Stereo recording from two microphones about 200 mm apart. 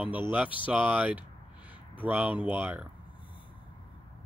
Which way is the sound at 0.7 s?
5° right (ahead or behind).